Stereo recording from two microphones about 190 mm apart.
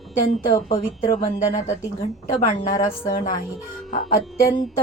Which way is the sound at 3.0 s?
45° left (ahead or behind).